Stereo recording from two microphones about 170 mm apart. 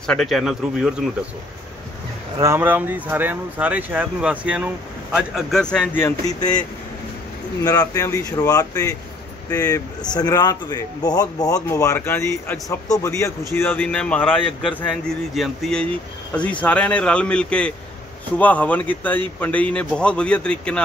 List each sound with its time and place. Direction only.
0.0 s speech: 5° left (ahead or behind)
2.3 s speech: 15° right (ahead or behind); by 6.6 s 20° left (ahead or behind)
7.6 s a man's voice: 20° left (ahead or behind); by 20.8 s 5° left (ahead or behind)